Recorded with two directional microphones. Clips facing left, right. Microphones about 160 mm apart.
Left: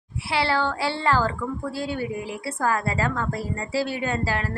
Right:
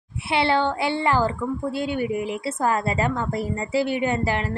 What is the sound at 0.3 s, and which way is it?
A woman's voice, 20° right (ahead or behind).